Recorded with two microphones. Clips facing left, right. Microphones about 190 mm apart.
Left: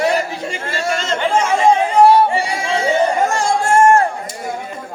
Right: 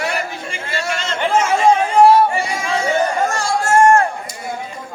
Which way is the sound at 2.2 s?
30° left (ahead or behind).